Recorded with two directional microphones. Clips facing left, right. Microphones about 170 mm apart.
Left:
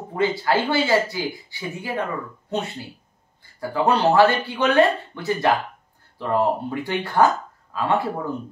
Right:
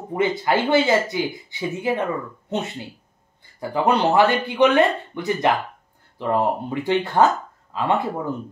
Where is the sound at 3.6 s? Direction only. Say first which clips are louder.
Even; 20° right (ahead or behind).